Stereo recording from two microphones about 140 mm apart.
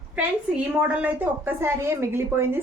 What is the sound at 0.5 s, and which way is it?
A woman's voice, 10° right (ahead or behind).